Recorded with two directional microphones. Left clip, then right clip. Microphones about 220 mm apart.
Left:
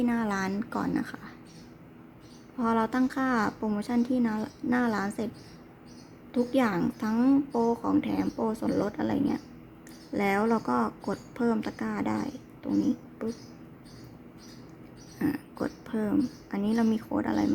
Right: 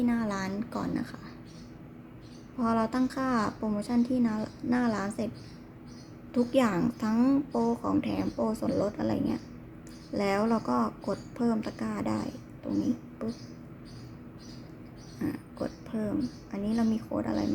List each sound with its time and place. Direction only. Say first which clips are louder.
0.0 s a woman's voice: left 2 dB; 20° left (ahead or behind)
2.6 s a woman's voice: left 2 dB; 15° left (ahead or behind)
6.3 s a woman's voice: even; 10° left (ahead or behind)
15.2 s speech: left 4 dB; 25° left (ahead or behind)